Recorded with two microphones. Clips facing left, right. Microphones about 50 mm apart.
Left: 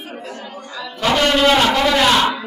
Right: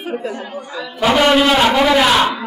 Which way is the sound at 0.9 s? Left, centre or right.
Centre.